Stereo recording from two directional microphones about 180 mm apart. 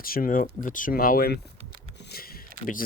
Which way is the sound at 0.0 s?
50° left (ahead or behind).